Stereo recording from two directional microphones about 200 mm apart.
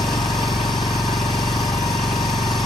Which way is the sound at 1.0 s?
20° left (ahead or behind).